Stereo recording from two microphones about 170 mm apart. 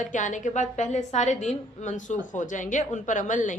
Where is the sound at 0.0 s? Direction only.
50° left (ahead or behind).